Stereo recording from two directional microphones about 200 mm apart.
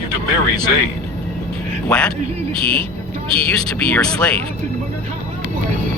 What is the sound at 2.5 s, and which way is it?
Speech, 25° right (ahead or behind).